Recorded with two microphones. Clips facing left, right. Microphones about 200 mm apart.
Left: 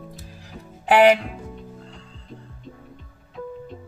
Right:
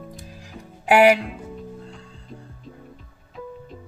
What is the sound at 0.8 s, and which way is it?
Speech, 10° right (ahead or behind).